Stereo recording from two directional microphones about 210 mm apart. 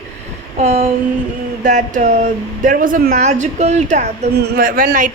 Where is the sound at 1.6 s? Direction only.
35° right (ahead or behind).